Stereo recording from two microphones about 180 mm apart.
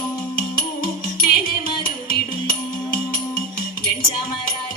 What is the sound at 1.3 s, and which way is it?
Carnatic music, 55° left (ahead or behind).